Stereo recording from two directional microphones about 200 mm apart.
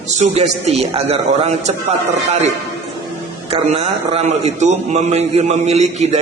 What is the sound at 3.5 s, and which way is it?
A man's voice, 30° right (ahead or behind).